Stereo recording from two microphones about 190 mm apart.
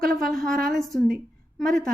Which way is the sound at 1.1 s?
Centre (ahead or behind).